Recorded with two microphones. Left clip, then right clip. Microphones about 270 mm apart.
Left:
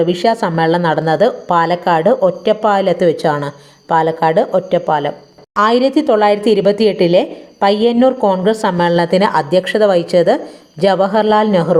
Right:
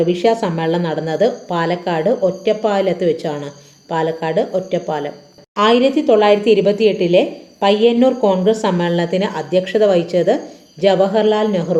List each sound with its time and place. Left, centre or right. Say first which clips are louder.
0.0 s a woman's voice: left 2 dB; left